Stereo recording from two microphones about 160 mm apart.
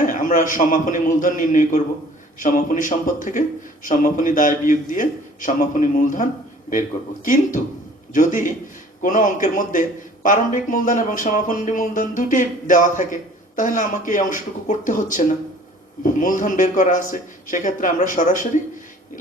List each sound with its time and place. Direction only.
0.0 s a man's voice: 55° left (ahead or behind)
8.1 s speech: 55° left (ahead or behind)